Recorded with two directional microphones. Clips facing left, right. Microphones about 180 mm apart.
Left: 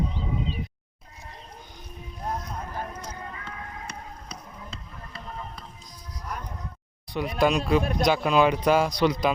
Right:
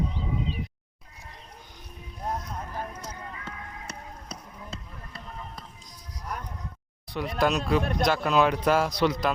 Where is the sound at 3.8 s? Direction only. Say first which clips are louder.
Left 1 dB; 40° right (ahead or behind).